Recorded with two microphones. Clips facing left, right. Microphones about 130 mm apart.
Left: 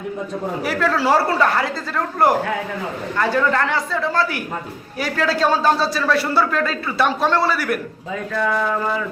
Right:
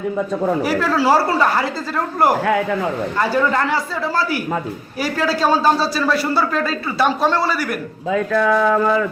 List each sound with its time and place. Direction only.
0.6 s a man's voice: 5° right (ahead or behind)
3.2 s a man's voice: 5° right (ahead or behind)
8.3 s a sound: 70° right (ahead or behind)